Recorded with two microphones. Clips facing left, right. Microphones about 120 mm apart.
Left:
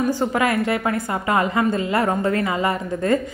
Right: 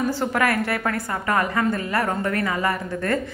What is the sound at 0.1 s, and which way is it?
A woman's voice, 15° left (ahead or behind).